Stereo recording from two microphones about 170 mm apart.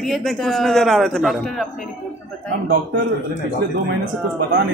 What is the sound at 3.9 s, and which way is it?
Speech, 90° right.